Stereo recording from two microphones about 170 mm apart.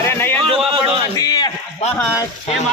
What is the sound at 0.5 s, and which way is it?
Speech, 35° right (ahead or behind).